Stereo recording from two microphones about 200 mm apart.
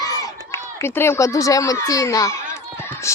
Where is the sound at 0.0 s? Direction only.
15° left (ahead or behind).